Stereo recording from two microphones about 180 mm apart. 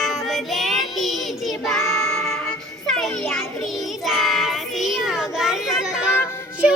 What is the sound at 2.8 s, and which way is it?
Music, centre (ahead or behind).